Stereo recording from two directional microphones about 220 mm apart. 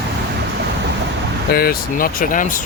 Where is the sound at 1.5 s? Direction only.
45° left (ahead or behind).